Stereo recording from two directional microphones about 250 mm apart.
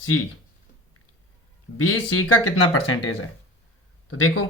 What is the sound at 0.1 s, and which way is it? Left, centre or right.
Speech, left.